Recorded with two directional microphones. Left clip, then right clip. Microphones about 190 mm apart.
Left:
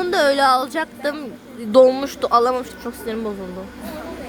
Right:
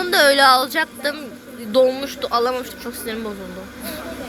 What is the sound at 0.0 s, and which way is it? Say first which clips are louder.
A woman's voice: right 3 dB; 20° left (ahead or behind).